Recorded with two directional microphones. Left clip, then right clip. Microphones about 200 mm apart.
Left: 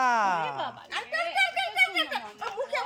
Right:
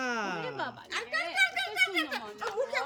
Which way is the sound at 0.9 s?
15° left (ahead or behind).